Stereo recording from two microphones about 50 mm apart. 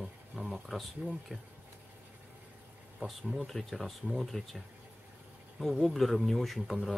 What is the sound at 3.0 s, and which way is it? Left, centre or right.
Speech, right.